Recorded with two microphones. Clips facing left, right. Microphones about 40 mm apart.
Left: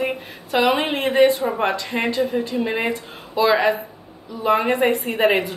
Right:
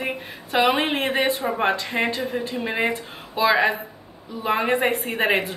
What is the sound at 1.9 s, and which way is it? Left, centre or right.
Speech, right.